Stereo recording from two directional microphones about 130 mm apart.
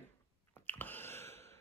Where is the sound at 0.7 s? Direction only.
15° left (ahead or behind).